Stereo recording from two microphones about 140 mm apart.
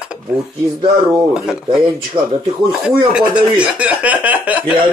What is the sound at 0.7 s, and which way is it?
Speech, 25° right (ahead or behind).